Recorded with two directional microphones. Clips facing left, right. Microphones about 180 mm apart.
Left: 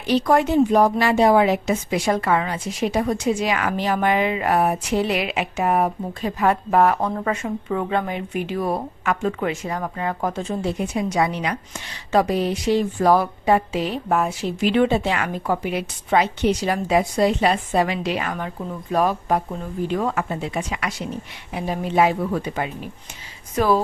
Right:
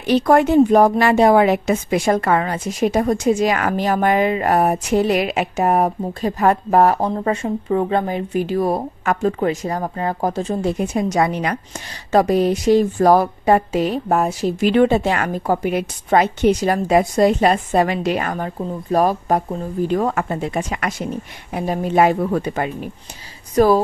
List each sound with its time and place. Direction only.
0.0 s a woman's voice: 55° right (ahead or behind)